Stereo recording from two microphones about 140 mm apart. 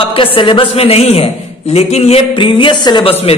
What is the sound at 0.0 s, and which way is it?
A man's voice, 40° left (ahead or behind).